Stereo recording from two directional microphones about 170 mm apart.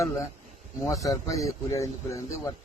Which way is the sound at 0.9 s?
20° left (ahead or behind).